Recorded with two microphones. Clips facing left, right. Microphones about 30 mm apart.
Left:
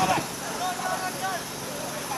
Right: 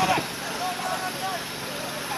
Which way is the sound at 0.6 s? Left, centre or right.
Right.